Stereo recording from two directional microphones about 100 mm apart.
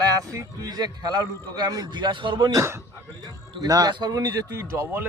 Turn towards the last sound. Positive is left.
turn(degrees=-25)  # may be behind; listen again after turning